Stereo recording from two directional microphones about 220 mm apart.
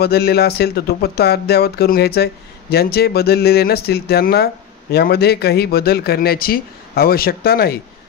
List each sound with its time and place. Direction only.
0.0 s speech: 45° left (ahead or behind)